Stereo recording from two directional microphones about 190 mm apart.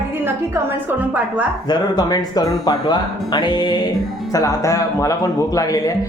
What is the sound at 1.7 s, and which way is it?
A man's voice, 20° left (ahead or behind).